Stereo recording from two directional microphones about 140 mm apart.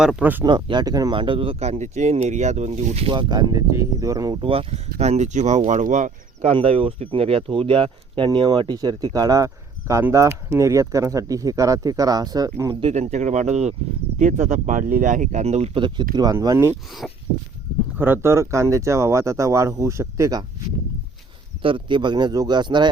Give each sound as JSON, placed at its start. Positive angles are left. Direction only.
{"t": 0.0, "sound": "speech", "side_deg": -10}
{"t": 0.4, "sound": "speech", "side_deg": -30}
{"t": 4.9, "sound": "speech", "side_deg": -55}
{"t": 6.5, "sound": "speech", "side_deg": -40}
{"t": 12.8, "sound": "speech", "side_deg": -55}
{"t": 16.1, "sound": "speech", "side_deg": -25}
{"t": 17.0, "sound": "a sound", "side_deg": 5}
{"t": 17.9, "sound": "speech", "side_deg": -15}
{"t": 21.6, "sound": "speech", "side_deg": -35}